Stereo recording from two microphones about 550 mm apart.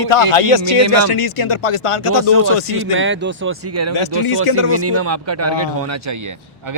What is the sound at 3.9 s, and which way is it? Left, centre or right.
Speech, left.